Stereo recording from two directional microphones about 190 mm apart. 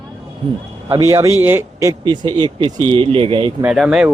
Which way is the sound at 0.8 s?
15° right (ahead or behind).